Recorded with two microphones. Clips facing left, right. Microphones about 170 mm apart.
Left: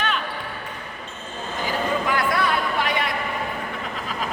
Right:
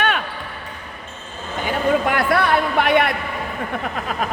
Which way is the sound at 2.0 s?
60° right (ahead or behind).